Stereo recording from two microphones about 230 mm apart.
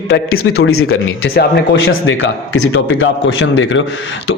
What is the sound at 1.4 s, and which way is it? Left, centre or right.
A man's voice, left.